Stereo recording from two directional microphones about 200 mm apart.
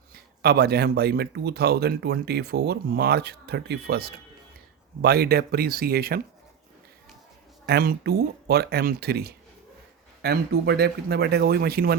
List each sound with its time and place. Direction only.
0.1 s speech: 50° right (ahead or behind)
7.7 s speech: 50° right (ahead or behind)